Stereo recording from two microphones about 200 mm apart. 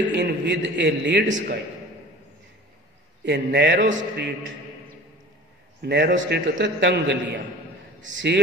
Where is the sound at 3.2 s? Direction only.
60° right (ahead or behind).